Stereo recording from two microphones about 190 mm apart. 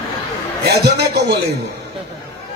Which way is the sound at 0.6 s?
60° right (ahead or behind).